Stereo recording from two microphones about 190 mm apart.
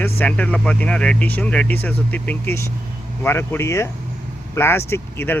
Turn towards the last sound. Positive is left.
turn(degrees=10)  # may be behind; listen again after turning